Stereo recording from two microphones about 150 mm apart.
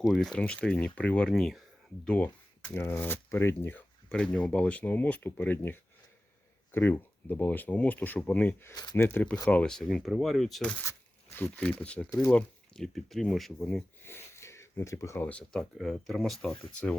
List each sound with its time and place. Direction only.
0.0 s speech: centre (ahead or behind)
8.7 s speech: 30° left (ahead or behind)
9.0 s speech: 15° left (ahead or behind)
10.6 s speech: 15° left (ahead or behind)
14.0 s speech: 15° left (ahead or behind)